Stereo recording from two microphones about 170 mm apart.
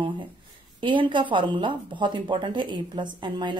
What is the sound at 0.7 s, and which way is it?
A woman's voice, 30° right (ahead or behind).